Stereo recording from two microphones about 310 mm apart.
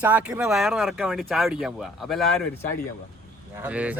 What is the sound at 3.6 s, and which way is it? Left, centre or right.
Speech, centre.